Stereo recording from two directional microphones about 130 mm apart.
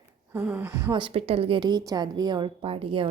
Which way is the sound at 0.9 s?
45° right (ahead or behind).